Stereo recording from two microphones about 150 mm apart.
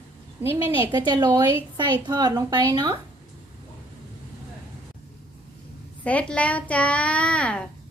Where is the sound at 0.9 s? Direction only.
30° right (ahead or behind).